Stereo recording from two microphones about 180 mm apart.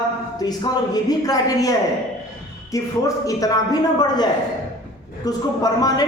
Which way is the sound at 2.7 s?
20° left (ahead or behind).